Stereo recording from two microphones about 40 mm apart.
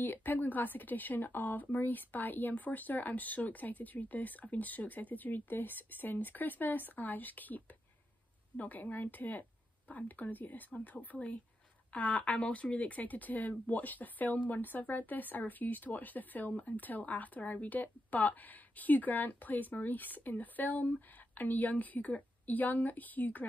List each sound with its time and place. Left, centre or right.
0.0 s a woman's voice: left